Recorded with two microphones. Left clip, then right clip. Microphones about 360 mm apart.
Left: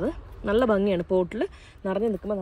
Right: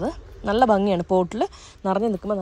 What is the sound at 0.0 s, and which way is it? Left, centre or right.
A woman's voice, centre.